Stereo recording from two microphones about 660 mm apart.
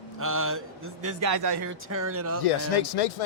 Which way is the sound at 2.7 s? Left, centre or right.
Left.